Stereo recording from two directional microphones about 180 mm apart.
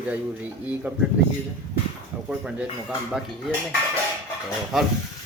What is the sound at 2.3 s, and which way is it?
Speech, 5° right (ahead or behind).